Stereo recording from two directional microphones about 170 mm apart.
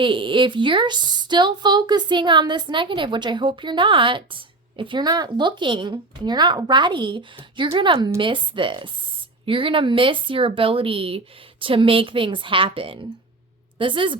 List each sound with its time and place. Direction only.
0.0 s a woman's voice: 30° right (ahead or behind)